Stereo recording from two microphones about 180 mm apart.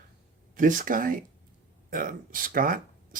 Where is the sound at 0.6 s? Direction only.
45° right (ahead or behind).